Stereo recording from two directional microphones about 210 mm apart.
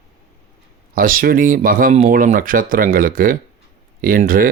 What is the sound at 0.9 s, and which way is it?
Speech, 45° right (ahead or behind).